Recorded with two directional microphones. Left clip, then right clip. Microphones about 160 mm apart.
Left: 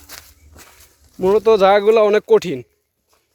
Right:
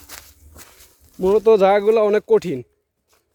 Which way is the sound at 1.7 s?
10° right (ahead or behind).